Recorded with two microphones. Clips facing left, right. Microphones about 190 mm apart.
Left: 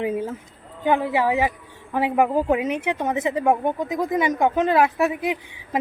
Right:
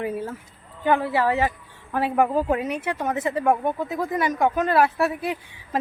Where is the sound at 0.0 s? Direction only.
20° left (ahead or behind).